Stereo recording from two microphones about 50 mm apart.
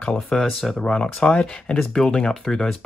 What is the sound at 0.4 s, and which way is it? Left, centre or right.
Speech, centre.